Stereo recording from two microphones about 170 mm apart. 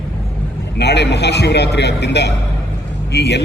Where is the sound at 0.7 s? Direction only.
85° left.